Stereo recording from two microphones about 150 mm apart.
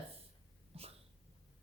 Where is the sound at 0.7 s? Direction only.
40° right (ahead or behind).